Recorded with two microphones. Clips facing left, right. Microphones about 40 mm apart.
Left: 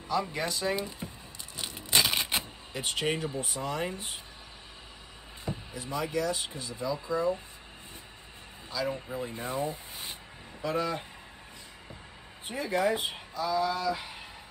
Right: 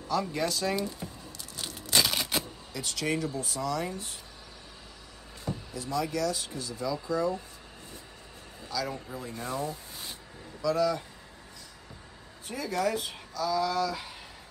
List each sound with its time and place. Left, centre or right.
0.1 s speech: left
1.6 s scissors: left
2.7 s speech: left
5.4 s speech: left
8.6 s speech: left
10.6 s speech: left
12.4 s speech: left